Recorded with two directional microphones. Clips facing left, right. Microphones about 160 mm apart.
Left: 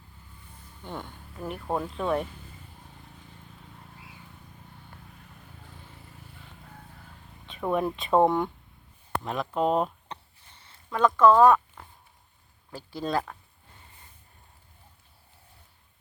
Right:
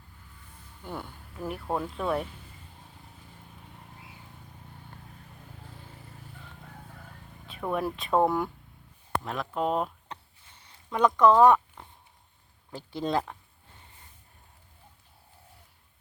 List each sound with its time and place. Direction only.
0.9 s speech: 10° right (ahead or behind)
7.4 s speech: centre (ahead or behind)
10.6 s a sound: 15° right (ahead or behind)
12.7 s speech: 20° right (ahead or behind)